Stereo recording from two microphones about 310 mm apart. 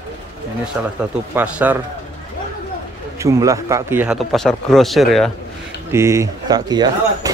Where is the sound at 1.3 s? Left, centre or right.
Centre.